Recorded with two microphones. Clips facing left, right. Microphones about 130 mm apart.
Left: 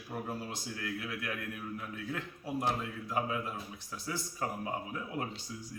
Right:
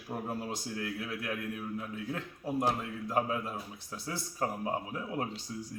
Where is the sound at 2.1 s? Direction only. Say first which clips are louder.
Right 1 dB; 40° right (ahead or behind).